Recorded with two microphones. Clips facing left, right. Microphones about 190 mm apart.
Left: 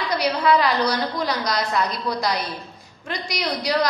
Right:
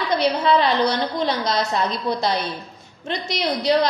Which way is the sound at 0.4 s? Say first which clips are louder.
Left 2 dB; 25° right (ahead or behind).